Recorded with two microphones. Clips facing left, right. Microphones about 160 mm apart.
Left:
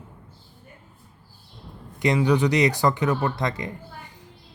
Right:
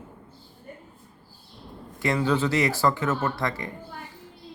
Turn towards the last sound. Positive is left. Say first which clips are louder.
# left 2 dB
turn(degrees=20)  # may be behind; listen again after turning